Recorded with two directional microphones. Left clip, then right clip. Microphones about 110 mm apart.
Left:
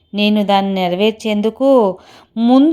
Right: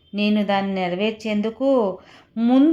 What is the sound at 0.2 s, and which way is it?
A woman's voice, 40° left (ahead or behind).